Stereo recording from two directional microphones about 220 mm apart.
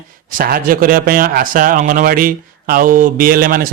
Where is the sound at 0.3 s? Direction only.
40° right (ahead or behind).